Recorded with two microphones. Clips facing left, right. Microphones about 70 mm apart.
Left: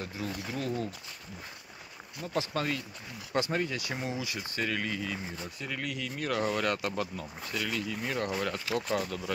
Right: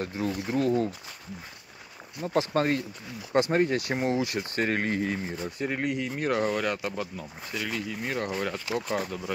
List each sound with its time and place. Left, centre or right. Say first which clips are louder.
0.4 s speech: right 10 dB; right
2.2 s speech: right 7 dB; right
5.4 s speech: right 7 dB; right
6.5 s speech: right 2 dB; centre